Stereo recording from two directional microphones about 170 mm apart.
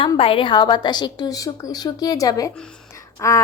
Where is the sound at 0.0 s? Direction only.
30° left (ahead or behind).